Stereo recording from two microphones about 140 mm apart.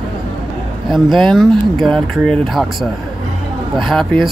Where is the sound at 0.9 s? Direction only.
Centre (ahead or behind).